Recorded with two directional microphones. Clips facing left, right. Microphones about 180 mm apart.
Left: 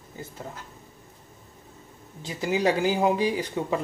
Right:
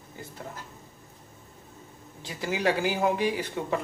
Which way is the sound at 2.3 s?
20° left (ahead or behind).